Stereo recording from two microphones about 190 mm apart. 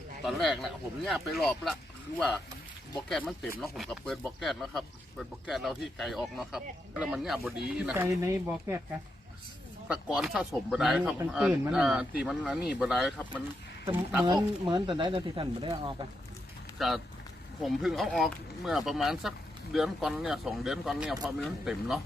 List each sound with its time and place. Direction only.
0.3 s speech: centre (ahead or behind)
8.0 s speech: 15° right (ahead or behind)
10.2 s speech: centre (ahead or behind)
14.7 s speech: 25° right (ahead or behind)
16.7 s speech: centre (ahead or behind)